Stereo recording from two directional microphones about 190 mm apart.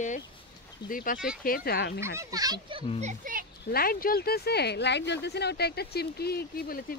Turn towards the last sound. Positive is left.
turn(degrees=50)  # may be behind; listen again after turning